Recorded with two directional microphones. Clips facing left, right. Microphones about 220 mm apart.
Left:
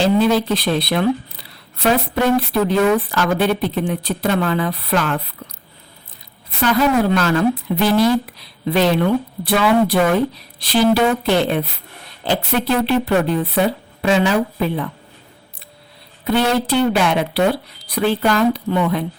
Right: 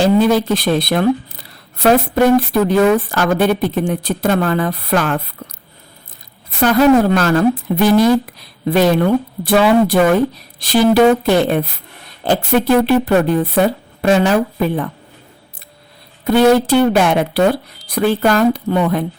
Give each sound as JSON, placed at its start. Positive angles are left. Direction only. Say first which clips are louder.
{"t": 0.0, "sound": "a woman's voice", "louder": "right 3 dB", "side_deg": -45}
{"t": 6.6, "sound": "a woman's voice", "louder": "right 5 dB", "side_deg": -45}
{"t": 16.3, "sound": "a woman's voice", "louder": "right 6 dB", "side_deg": -45}